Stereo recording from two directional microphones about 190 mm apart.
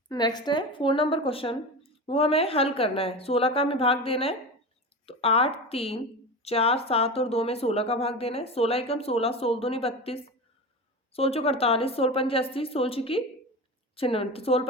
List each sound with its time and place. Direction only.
0.1 s a woman's voice: 20° left (ahead or behind)